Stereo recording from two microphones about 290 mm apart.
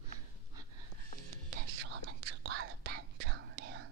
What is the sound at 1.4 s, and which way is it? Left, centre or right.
Whispering, right.